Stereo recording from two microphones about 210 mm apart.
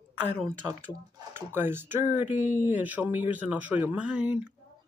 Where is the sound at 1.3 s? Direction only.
10° right (ahead or behind).